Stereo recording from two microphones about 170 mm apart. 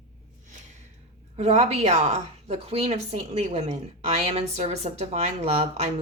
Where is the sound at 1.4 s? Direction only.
40° right (ahead or behind).